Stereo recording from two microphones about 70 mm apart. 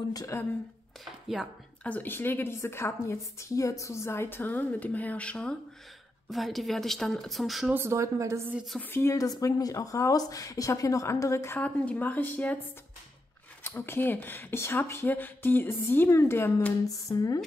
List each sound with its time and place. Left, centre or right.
0.3 s speech: left
1.8 s a woman's voice: left
6.3 s speech: centre
7.7 s speech: right
8.9 s speech: left
9.3 s speech: left
11.6 s a woman's voice: left
13.7 s a woman's voice: left
16.8 s speech: left